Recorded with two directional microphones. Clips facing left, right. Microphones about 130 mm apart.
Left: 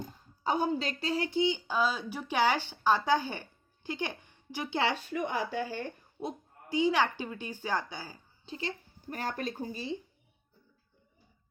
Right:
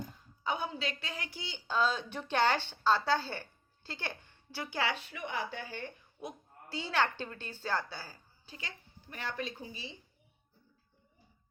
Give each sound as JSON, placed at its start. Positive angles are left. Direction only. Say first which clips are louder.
{"t": 0.4, "sound": "a woman's voice", "louder": "left 6 dB", "side_deg": 40}
{"t": 4.9, "sound": "speech", "louder": "left 6 dB", "side_deg": 45}
{"t": 6.7, "sound": "speech", "louder": "left 5 dB", "side_deg": 15}
{"t": 9.0, "sound": "speech", "louder": "left 4 dB", "side_deg": 45}